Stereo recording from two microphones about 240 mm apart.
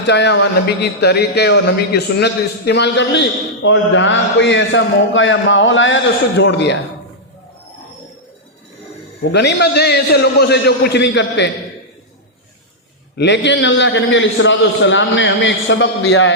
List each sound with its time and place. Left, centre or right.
0.1 s a man's voice: left
9.3 s a man's voice: left
13.1 s a man's voice: left